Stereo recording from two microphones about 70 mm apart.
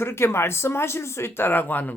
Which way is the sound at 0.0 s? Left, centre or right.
Left.